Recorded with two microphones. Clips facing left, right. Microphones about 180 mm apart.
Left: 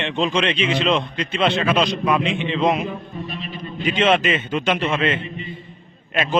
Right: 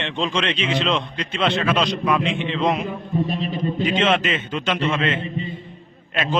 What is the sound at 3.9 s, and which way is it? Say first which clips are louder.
A man's voice: left 5 dB; 5° left (ahead or behind).